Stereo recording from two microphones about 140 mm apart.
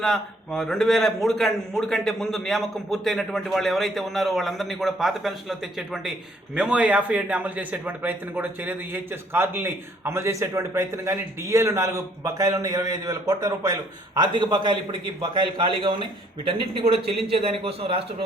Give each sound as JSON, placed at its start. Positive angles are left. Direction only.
{"t": 0.0, "sound": "a man's voice", "side_deg": 5}